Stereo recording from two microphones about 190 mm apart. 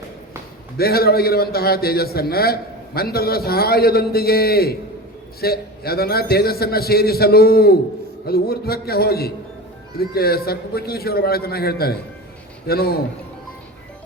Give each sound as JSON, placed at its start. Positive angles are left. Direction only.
{"t": 0.8, "sound": "a man's voice", "side_deg": 55}